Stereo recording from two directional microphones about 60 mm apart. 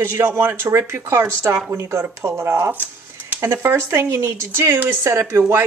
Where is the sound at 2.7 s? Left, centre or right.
Right.